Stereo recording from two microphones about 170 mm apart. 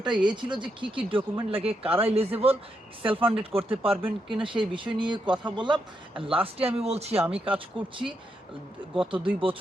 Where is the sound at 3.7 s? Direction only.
35° right (ahead or behind).